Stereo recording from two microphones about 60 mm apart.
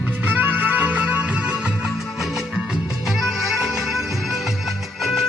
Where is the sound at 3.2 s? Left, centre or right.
Centre.